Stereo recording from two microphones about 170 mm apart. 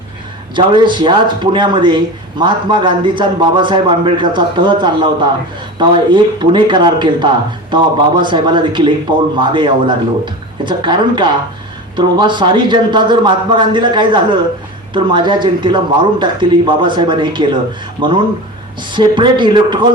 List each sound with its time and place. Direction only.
0.5 s a man's voice: 25° right (ahead or behind)